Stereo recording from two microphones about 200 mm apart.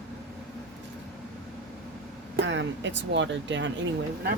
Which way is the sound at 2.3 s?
65° right (ahead or behind).